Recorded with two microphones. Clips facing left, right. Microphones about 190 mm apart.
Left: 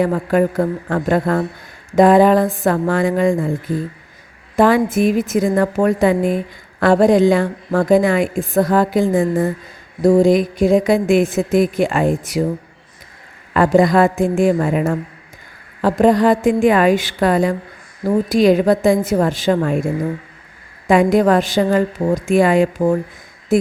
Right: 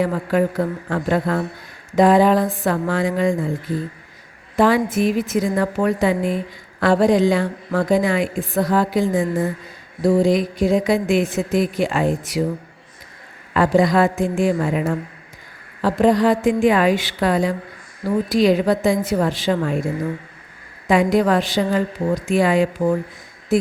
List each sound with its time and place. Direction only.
0.0 s a woman's voice: 50° left (ahead or behind)
13.5 s a woman's voice: 50° left (ahead or behind)
20.8 s a woman's voice: 50° left (ahead or behind)
23.5 s a sound: 50° left (ahead or behind)